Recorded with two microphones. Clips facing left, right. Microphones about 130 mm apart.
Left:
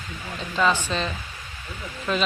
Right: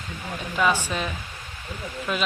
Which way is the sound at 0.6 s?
10° right (ahead or behind).